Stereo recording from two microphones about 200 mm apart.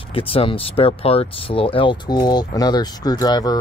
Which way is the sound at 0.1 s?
25° left (ahead or behind).